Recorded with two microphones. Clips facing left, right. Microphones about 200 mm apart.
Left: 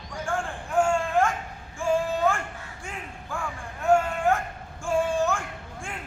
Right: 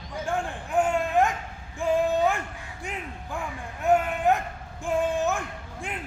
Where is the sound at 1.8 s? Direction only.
20° right (ahead or behind).